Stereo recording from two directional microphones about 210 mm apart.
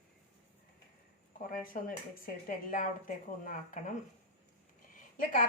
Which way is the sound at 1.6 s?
40° left (ahead or behind).